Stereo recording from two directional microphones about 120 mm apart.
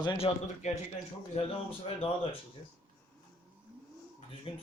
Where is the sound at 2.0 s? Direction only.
50° left (ahead or behind).